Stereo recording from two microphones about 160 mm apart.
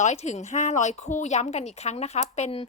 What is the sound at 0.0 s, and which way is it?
A woman's voice, 45° left (ahead or behind).